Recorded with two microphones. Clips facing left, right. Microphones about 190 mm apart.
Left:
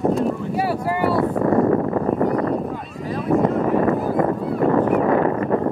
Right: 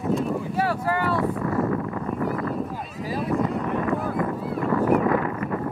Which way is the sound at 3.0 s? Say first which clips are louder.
Left 2 dB; 5° right (ahead or behind).